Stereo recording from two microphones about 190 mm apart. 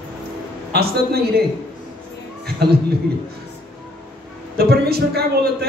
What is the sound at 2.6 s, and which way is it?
Speech, 60° right (ahead or behind).